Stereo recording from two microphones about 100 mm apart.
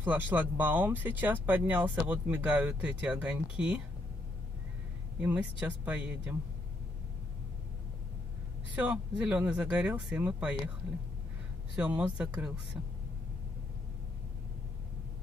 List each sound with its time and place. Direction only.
0.0 s speech: 20° right (ahead or behind)
5.2 s speech: 15° right (ahead or behind)
8.7 s speech: 10° right (ahead or behind)
11.7 s speech: 15° right (ahead or behind)